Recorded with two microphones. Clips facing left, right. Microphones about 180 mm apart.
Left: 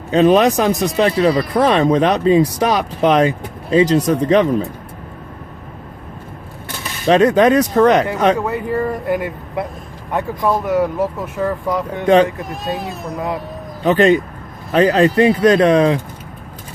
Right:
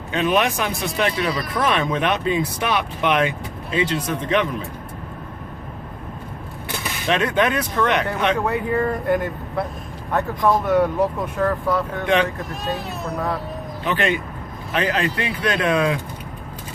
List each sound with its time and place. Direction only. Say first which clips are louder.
0.1 s speech: left 8 dB; 35° left (ahead or behind)
7.1 s speech: left 9 dB; 40° left (ahead or behind)
8.4 s a man's voice: left 2 dB; centre (ahead or behind)
12.0 s speech: left 9 dB; 40° left (ahead or behind)
13.1 s speech: left 2 dB; 15° left (ahead or behind)
13.8 s speech: left 10 dB; 40° left (ahead or behind)